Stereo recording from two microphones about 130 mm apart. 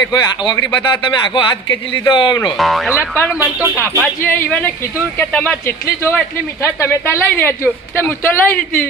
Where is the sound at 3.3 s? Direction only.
15° right (ahead or behind).